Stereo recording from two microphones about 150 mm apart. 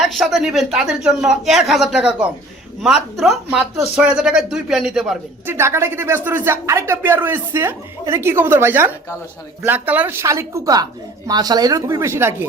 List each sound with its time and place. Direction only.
0.0 s speech: centre (ahead or behind)
5.5 s speech: 15° right (ahead or behind)